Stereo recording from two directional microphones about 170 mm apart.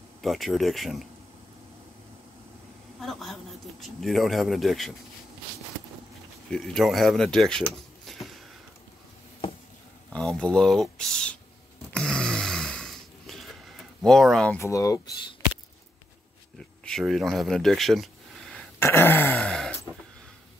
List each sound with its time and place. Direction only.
0.2 s speech: centre (ahead or behind)
3.0 s a woman's voice: centre (ahead or behind)
6.5 s speech: centre (ahead or behind)
10.1 s speech: 5° left (ahead or behind)
11.9 s a sound: 5° left (ahead or behind)
14.6 s speech: 20° left (ahead or behind)
16.5 s a sound: 5° left (ahead or behind)
18.8 s wail: 15° left (ahead or behind)